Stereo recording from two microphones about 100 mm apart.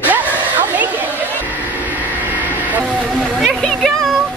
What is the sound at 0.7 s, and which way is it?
Vehicle, 15° right (ahead or behind).